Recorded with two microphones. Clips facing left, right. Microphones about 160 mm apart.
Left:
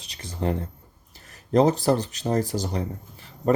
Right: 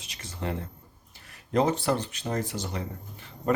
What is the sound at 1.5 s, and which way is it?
Speech, 35° left (ahead or behind).